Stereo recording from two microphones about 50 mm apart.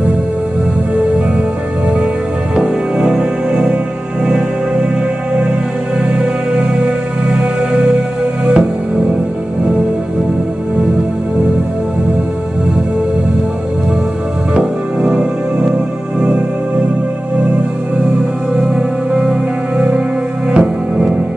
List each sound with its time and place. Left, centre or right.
2.5 s music: centre
6.0 s music: right
14.5 s music: centre
18.6 s music: centre
20.5 s music: centre